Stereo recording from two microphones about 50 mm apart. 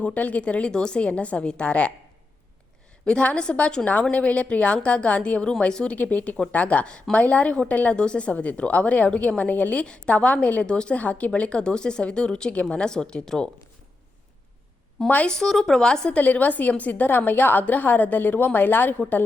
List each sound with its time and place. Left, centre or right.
0.0 s a woman's voice: left
3.1 s a woman's voice: left
6.8 s a woman's voice: centre
9.8 s a woman's voice: left
15.3 s a woman's voice: centre
16.1 s a woman's voice: left